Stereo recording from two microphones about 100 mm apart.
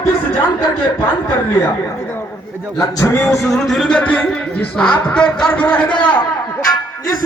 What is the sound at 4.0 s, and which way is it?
Speech, 15° left (ahead or behind).